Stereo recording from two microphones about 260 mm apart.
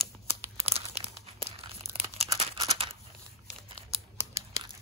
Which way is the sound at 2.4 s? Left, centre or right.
Right.